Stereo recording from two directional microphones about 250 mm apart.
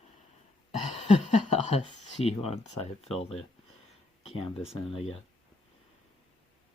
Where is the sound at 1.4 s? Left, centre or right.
Left.